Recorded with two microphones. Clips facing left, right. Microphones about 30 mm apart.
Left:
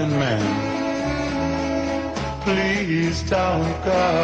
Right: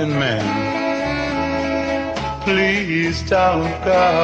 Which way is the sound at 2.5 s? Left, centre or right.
Right.